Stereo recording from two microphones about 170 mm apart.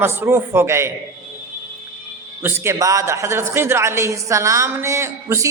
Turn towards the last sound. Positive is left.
turn(degrees=-15)  # may be behind; listen again after turning